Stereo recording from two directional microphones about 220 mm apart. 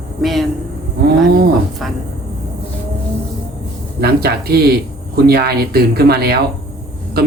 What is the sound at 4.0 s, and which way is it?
A man's voice, 45° right (ahead or behind).